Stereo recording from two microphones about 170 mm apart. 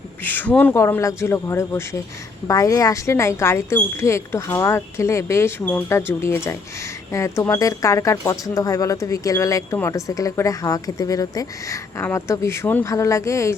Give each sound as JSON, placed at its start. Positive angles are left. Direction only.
{"t": 0.2, "sound": "speech", "side_deg": 10}